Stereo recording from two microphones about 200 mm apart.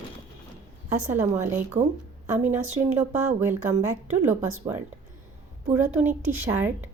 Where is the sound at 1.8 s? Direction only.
35° right (ahead or behind).